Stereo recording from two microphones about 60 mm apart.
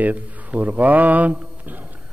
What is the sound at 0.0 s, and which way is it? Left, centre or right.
A man's voice, right.